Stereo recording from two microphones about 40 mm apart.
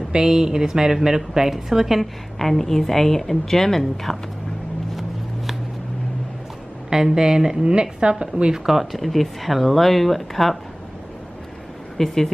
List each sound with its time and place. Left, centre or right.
0.1 s a woman's voice: centre
2.3 s a woman's voice: centre
6.9 s a woman's voice: centre
8.9 s speech: centre
12.0 s a woman's voice: centre